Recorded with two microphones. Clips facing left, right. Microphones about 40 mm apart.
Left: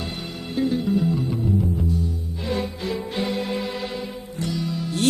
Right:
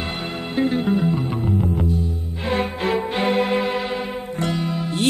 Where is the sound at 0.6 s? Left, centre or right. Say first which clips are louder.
Right 2 dB; right.